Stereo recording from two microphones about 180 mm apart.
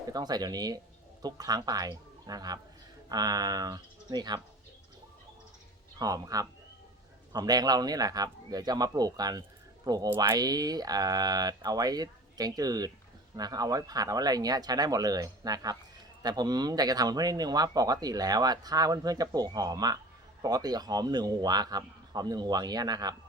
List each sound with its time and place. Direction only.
0.1 s speech: 20° right (ahead or behind)
6.0 s speech: 20° right (ahead or behind)